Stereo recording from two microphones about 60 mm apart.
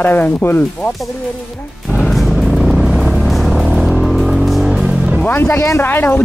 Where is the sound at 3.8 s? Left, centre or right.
Centre.